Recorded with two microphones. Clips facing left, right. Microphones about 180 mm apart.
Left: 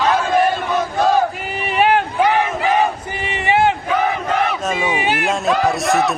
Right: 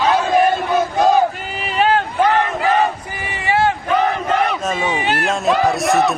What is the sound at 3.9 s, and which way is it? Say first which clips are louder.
Battle cry: right 1 dB; centre (ahead or behind).